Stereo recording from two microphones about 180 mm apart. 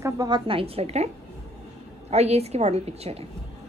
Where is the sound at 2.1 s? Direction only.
35° right (ahead or behind).